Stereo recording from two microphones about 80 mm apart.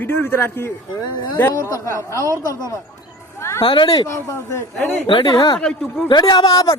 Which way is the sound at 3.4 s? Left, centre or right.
Left.